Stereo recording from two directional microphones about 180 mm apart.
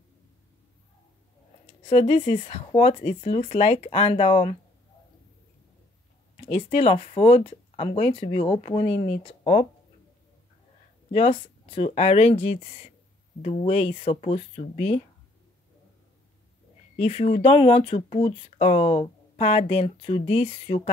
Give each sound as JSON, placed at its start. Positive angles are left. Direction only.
{"t": 1.9, "sound": "speech", "side_deg": 35}
{"t": 6.5, "sound": "speech", "side_deg": 35}
{"t": 11.1, "sound": "speech", "side_deg": 35}
{"t": 16.9, "sound": "speech", "side_deg": 35}